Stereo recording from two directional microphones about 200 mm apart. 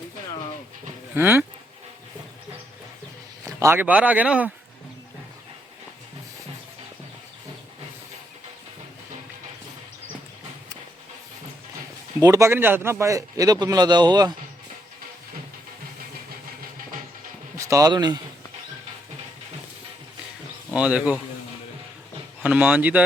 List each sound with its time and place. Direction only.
1.1 s a man's voice: 10° right (ahead or behind)
3.4 s a man's voice: 15° right (ahead or behind)
12.2 s a man's voice: 15° right (ahead or behind)
17.6 s speech: 15° right (ahead or behind)
20.7 s a man's voice: 5° right (ahead or behind)
22.4 s a man's voice: 5° right (ahead or behind)